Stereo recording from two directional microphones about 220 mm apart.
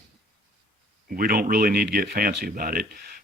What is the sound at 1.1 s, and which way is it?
Speech, 40° right (ahead or behind).